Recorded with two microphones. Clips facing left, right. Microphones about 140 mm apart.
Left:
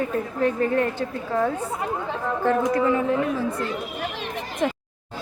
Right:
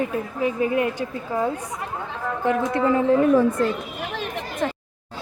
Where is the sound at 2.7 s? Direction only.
30° right (ahead or behind).